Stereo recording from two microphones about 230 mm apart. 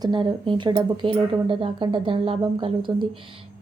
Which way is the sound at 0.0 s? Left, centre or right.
Centre.